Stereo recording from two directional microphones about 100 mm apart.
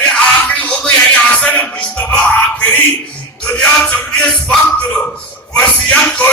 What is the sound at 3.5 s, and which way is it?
Music, 10° left (ahead or behind).